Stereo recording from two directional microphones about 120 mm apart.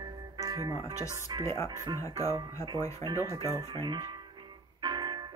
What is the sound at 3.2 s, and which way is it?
Speech, 30° right (ahead or behind).